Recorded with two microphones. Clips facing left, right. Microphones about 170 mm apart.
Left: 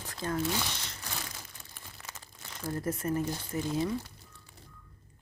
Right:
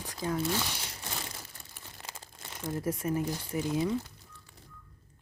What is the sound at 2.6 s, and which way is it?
Speech, 10° right (ahead or behind).